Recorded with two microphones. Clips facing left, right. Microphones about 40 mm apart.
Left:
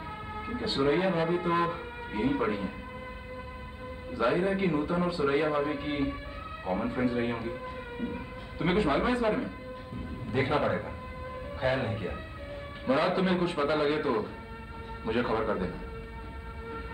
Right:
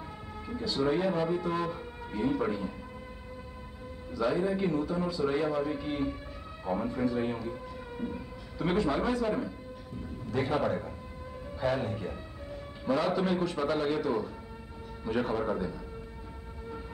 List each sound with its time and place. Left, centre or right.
0.5 s a man's voice: left
4.1 s a man's voice: left